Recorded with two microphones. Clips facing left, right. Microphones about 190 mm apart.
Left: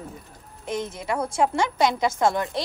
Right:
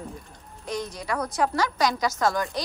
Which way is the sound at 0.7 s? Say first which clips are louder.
Left 2 dB; 25° left (ahead or behind).